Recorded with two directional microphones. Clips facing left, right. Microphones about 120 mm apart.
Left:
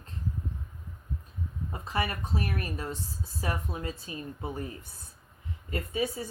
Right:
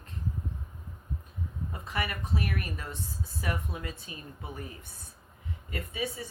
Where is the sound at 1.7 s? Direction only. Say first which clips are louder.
Left 3 dB; 30° left (ahead or behind).